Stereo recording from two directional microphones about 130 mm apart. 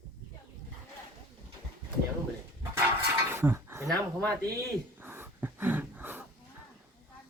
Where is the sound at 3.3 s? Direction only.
20° right (ahead or behind).